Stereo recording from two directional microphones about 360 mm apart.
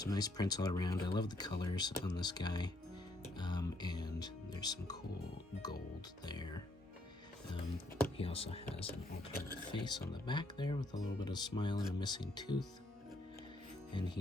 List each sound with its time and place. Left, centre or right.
0.0 s speech: centre
3.3 s music: centre
6.2 s speech: centre
8.0 s speech: centre
13.9 s speech: centre